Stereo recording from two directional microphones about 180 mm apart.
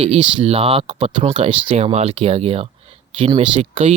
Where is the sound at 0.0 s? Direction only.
35° right (ahead or behind).